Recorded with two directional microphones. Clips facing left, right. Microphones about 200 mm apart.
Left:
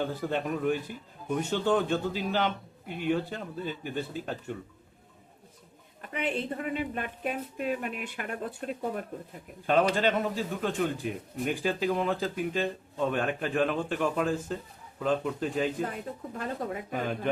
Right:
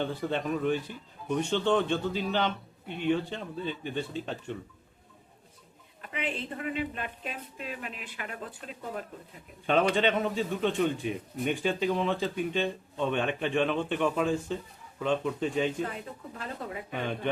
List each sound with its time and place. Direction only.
0.0 s a man's voice: 10° left (ahead or behind)
6.0 s a woman's voice: 45° left (ahead or behind)
9.6 s a man's voice: centre (ahead or behind)
16.9 s a man's voice: 5° left (ahead or behind)